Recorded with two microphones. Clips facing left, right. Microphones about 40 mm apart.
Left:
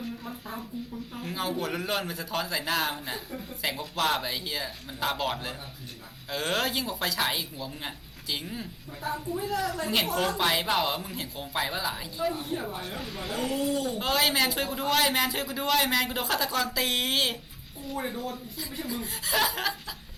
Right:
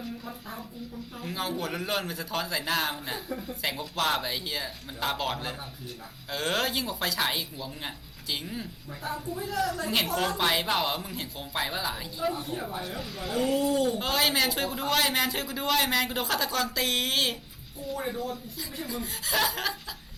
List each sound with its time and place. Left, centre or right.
0.3 s a man's voice: centre